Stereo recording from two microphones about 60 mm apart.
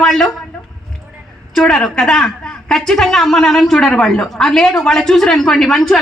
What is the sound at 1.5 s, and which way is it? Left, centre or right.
A woman's voice, centre.